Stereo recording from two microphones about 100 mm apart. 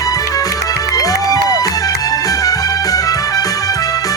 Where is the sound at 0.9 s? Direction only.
40° left (ahead or behind).